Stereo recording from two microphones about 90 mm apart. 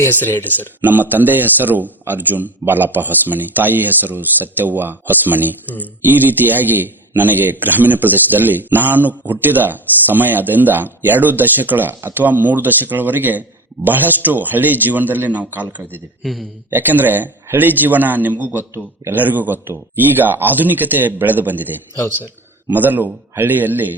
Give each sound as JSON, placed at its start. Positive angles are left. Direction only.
{"t": 0.0, "sound": "speech", "side_deg": 20}
{"t": 0.8, "sound": "a man's voice", "side_deg": -20}
{"t": 5.6, "sound": "speech", "side_deg": 20}
{"t": 6.0, "sound": "a man's voice", "side_deg": -20}
{"t": 16.2, "sound": "speech", "side_deg": 0}
{"t": 16.6, "sound": "a man's voice", "side_deg": -20}